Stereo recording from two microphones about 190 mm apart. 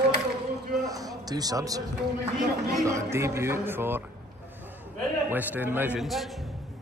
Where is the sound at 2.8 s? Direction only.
15° right (ahead or behind).